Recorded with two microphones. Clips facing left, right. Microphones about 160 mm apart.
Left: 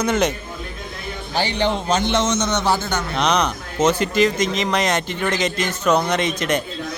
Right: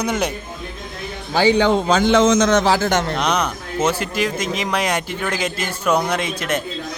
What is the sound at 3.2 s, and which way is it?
Speech, 5° right (ahead or behind).